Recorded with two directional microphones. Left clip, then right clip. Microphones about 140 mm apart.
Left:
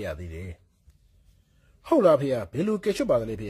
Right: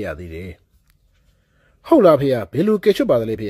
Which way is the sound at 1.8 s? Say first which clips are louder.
Right 7 dB; 25° right (ahead or behind).